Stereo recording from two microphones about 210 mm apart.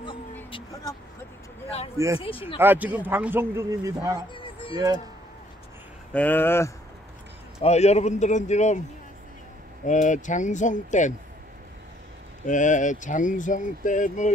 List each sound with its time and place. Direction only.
0.5 s vehicle: 25° left (ahead or behind)
2.1 s speech: 25° left (ahead or behind)
2.6 s a man's voice: 10° right (ahead or behind)
4.3 s a sound: 25° left (ahead or behind)
6.1 s speech: 10° left (ahead or behind)
7.6 s speech: 30° left (ahead or behind)
9.8 s speech: 35° left (ahead or behind)
12.4 s speech: 35° left (ahead or behind)